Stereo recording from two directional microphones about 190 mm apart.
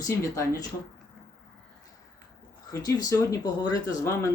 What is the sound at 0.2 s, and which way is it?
Speech, 15° left (ahead or behind).